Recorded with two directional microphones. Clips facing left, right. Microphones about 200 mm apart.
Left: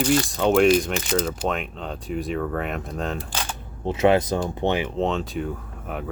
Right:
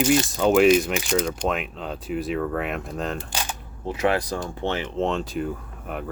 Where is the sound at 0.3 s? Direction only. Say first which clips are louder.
Even; centre (ahead or behind).